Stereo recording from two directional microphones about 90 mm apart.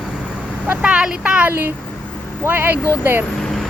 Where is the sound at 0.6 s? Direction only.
15° right (ahead or behind).